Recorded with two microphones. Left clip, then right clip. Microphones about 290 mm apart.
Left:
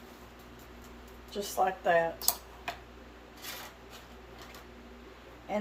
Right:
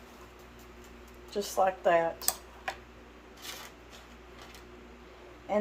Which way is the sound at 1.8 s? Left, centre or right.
Right.